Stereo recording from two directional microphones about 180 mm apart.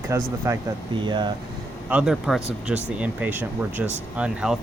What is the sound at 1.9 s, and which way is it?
Speech, 5° right (ahead or behind).